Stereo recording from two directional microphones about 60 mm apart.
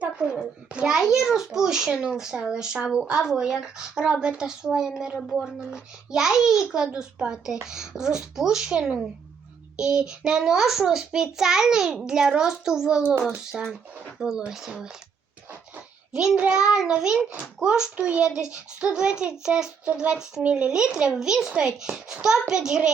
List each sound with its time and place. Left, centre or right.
0.0 s a child's voice: centre
0.9 s a child's voice: centre
16.1 s a child's voice: centre